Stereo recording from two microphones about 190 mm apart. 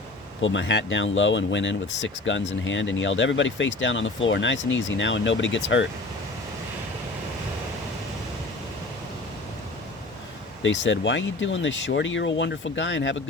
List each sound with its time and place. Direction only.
0.4 s speech: 70° left (ahead or behind)
10.6 s speech: 75° left (ahead or behind)